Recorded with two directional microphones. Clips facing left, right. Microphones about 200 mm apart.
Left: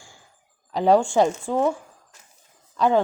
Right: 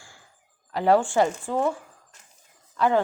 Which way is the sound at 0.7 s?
15° left (ahead or behind).